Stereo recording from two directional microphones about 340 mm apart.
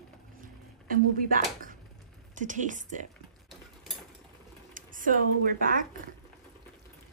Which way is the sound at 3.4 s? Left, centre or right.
Centre.